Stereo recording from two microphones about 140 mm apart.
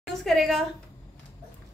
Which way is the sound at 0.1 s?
Centre (ahead or behind).